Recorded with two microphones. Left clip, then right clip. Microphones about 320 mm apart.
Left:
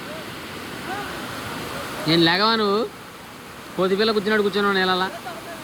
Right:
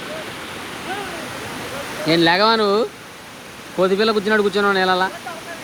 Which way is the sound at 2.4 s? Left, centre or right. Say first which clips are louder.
Right 4 dB; centre.